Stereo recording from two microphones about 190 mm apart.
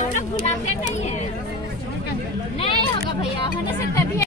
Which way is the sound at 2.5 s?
30° left (ahead or behind).